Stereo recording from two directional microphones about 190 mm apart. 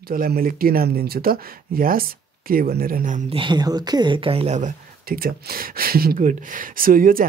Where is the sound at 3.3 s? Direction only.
25° right (ahead or behind).